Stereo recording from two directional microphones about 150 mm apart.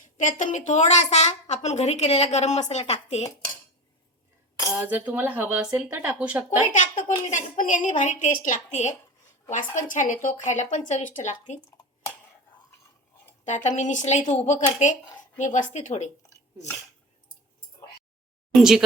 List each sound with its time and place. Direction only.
0.2 s a woman's voice: 55° left (ahead or behind)
4.8 s speech: 10° right (ahead or behind)
6.7 s a woman's voice: 55° left (ahead or behind)
9.9 s a woman's voice: 60° left (ahead or behind)
13.4 s a woman's voice: 50° left (ahead or behind)
18.5 s speech: 5° right (ahead or behind)